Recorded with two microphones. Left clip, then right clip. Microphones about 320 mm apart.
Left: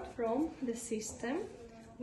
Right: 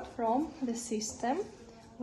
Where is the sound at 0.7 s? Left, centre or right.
Right.